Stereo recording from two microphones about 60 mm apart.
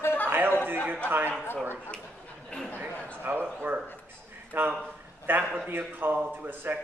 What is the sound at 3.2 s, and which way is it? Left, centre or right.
A man's voice, right.